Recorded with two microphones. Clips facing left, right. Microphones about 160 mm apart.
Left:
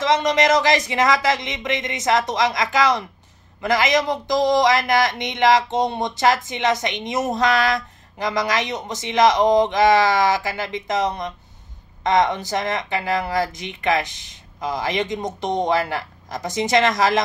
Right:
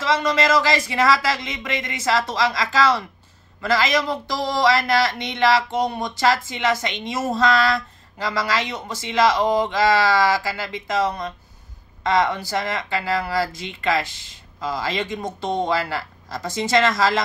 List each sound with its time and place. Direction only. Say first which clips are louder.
0.0 s speech: left 2 dB; 20° left (ahead or behind)